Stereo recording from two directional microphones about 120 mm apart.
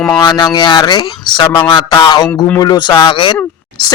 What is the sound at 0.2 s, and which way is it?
Speech, 40° left (ahead or behind).